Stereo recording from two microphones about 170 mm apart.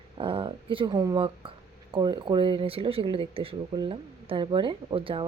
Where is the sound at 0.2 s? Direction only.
30° right (ahead or behind).